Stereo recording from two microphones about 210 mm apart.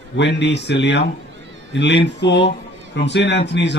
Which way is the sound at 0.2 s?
55° left (ahead or behind).